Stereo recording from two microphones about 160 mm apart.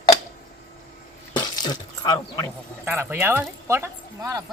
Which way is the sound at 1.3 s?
25° left (ahead or behind).